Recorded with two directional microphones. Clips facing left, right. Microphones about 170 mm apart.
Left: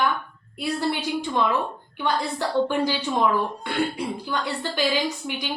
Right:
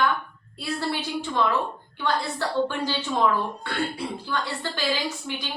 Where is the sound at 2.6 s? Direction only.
15° left (ahead or behind).